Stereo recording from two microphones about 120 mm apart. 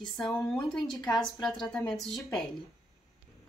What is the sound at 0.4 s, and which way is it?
A woman's voice, 5° left (ahead or behind).